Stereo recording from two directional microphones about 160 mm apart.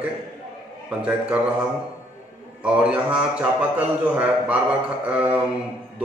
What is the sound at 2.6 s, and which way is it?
A man's voice, 5° right (ahead or behind).